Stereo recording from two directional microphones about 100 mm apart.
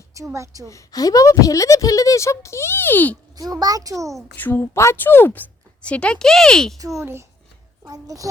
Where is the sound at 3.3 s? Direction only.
40° right (ahead or behind).